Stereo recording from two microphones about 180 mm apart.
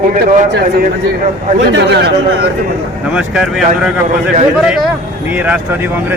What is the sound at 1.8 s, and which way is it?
Speech, 70° right (ahead or behind).